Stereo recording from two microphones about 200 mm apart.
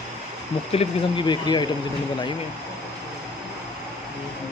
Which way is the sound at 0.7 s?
25° left (ahead or behind).